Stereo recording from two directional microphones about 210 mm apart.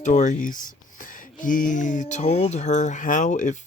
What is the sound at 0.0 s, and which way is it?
Speech, 35° left (ahead or behind).